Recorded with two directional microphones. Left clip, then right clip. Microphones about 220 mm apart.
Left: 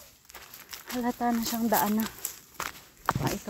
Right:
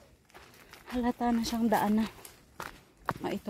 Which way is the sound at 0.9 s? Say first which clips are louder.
Left 1 dB; 10° right (ahead or behind).